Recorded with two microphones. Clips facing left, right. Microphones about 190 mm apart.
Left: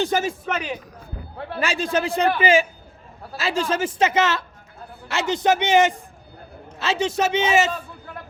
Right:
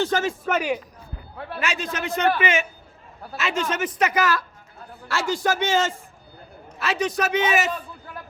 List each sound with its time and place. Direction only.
0.0 s speech: 10° left (ahead or behind)
0.4 s speech: 10° right (ahead or behind)
1.5 s a man's voice: 30° left (ahead or behind)